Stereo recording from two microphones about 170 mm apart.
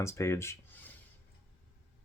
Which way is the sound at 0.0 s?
15° left (ahead or behind).